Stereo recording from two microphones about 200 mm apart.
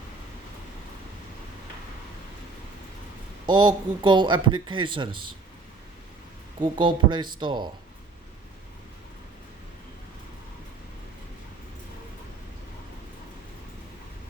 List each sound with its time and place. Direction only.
3.4 s speech: 20° right (ahead or behind)
6.6 s speech: 25° right (ahead or behind)